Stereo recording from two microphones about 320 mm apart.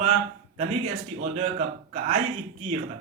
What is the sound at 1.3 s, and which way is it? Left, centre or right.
Speech, right.